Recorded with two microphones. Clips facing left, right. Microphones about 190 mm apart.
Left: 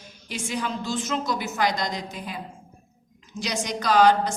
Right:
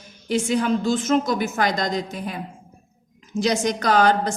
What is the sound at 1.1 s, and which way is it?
A man's voice, 50° right (ahead or behind).